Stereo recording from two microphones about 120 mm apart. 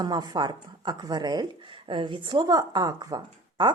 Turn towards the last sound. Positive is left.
turn(degrees=-35)  # may be behind; listen again after turning